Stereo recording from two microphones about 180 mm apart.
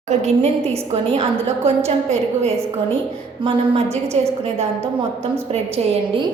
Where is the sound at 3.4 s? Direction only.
30° right (ahead or behind).